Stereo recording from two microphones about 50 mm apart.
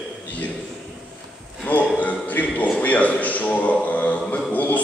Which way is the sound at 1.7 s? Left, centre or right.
Left.